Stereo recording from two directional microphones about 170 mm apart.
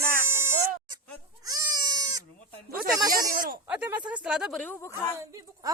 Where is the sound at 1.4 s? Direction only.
20° right (ahead or behind).